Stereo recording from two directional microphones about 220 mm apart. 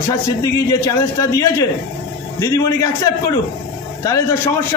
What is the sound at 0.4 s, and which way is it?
A man's voice, 15° left (ahead or behind).